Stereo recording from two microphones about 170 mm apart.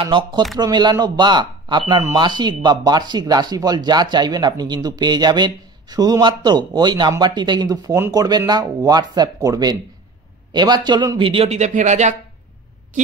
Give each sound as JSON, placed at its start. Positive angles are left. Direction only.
{"t": 0.0, "sound": "a man's voice", "side_deg": -30}